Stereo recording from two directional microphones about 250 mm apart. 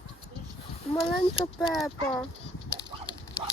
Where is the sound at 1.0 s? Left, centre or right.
Left.